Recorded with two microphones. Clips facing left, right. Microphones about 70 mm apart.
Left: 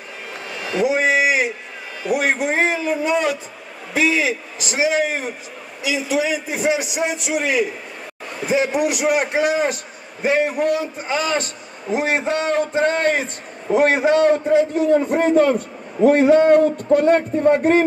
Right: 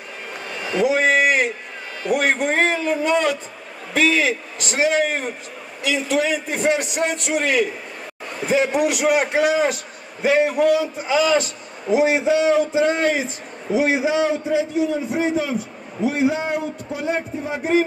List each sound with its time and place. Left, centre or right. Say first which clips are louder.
0.5 s a sound: even; centre
2.0 s a man's voice: even; centre
12.0 s a man's voice: right 3 dB; left